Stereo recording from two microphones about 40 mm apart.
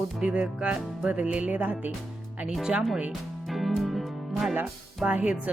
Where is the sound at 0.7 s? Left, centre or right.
Right.